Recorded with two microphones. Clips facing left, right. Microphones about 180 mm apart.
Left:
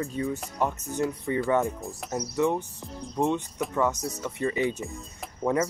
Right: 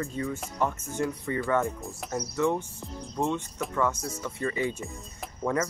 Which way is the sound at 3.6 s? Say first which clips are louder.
Left 3 dB; centre (ahead or behind).